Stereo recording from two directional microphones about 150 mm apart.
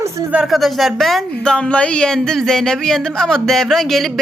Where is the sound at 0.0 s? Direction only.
20° right (ahead or behind).